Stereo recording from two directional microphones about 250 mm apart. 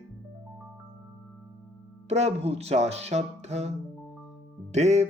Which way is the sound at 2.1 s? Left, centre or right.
Right.